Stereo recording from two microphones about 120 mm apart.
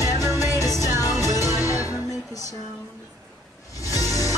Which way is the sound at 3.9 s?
30° left (ahead or behind).